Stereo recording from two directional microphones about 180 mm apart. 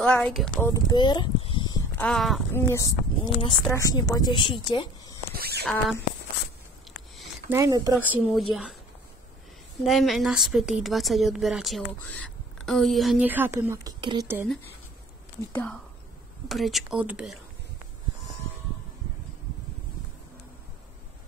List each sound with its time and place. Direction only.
0.0 s a woman's voice: 5° left (ahead or behind)
0.6 s speech: 15° left (ahead or behind)
2.0 s a woman's voice: 5° left (ahead or behind)
2.5 s speech: 15° left (ahead or behind)
5.3 s a sound: 60° right (ahead or behind)
7.4 s speech: 15° right (ahead or behind)
8.3 s a woman's voice: centre (ahead or behind)
9.8 s a woman's voice: centre (ahead or behind)
15.5 s a woman's voice: 10° left (ahead or behind)